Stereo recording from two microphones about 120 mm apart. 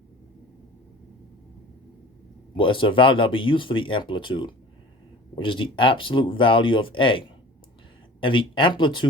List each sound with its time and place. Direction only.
2.6 s speech: 45° left (ahead or behind)